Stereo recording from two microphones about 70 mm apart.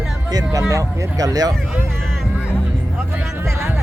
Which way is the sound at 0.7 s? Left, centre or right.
Right.